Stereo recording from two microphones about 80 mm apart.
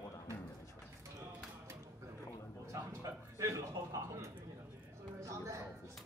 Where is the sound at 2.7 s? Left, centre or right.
Right.